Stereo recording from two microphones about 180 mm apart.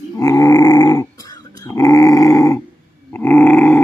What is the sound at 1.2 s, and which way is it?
Dog, 20° left (ahead or behind).